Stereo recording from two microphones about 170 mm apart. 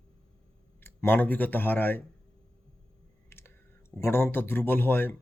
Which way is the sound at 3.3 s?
15° left (ahead or behind).